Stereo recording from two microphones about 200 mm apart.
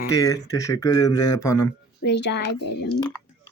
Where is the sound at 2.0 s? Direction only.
60° left (ahead or behind).